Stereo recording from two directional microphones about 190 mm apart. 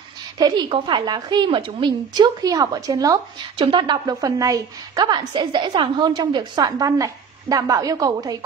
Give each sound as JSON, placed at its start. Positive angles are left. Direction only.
{"t": 0.4, "sound": "a woman's voice", "side_deg": -25}